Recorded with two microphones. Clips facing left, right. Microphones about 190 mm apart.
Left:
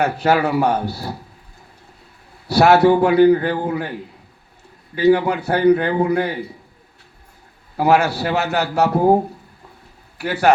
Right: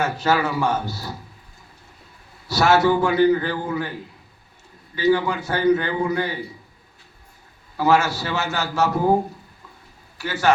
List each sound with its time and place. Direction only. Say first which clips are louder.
0.0 s a man's voice: left 4 dB; 60° left (ahead or behind)
2.5 s a man's voice: left 5 dB; 60° left (ahead or behind)
4.9 s a man's voice: left 5 dB; 60° left (ahead or behind)
7.8 s a man's voice: left 3 dB; 60° left (ahead or behind)
10.2 s a man's voice: left 4 dB; 60° left (ahead or behind)